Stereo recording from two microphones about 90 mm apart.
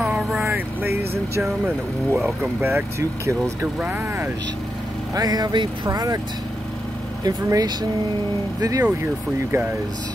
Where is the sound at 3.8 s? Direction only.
20° right (ahead or behind).